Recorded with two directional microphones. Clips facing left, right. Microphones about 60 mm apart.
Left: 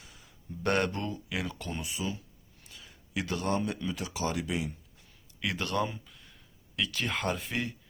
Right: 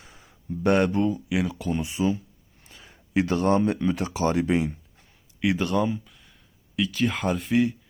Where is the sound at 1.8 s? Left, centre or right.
Right.